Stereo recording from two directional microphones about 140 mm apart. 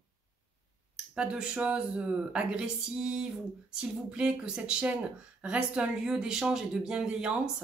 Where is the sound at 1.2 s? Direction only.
5° right (ahead or behind).